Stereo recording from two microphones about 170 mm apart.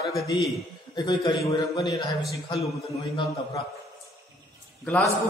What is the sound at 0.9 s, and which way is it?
A man's voice, 25° left (ahead or behind).